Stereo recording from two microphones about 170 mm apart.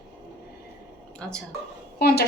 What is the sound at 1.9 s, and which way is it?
Speech, 65° left (ahead or behind).